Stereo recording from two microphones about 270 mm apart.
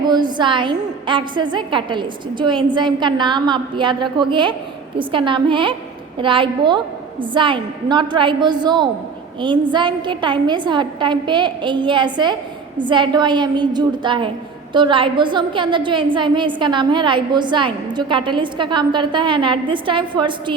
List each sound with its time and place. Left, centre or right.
0.1 s a woman's voice: centre